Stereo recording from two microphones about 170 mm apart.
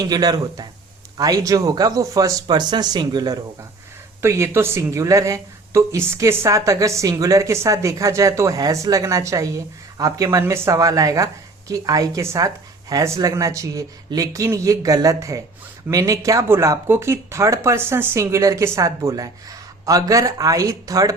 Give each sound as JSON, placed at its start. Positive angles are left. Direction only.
{"t": 0.0, "sound": "speech", "side_deg": -25}